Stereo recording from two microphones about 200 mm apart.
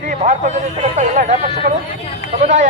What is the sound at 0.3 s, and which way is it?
A man's voice, 35° right (ahead or behind).